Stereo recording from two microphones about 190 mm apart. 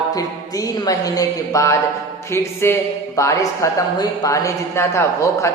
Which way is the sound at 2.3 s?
15° left (ahead or behind).